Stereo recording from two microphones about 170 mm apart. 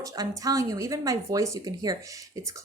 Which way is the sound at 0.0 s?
20° right (ahead or behind).